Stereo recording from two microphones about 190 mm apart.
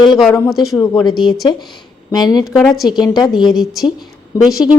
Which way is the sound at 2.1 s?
20° left (ahead or behind).